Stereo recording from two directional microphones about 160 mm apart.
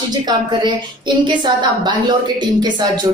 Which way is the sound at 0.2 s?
30° right (ahead or behind).